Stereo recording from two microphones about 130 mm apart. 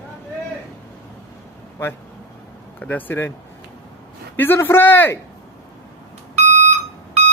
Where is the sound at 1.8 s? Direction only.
20° left (ahead or behind).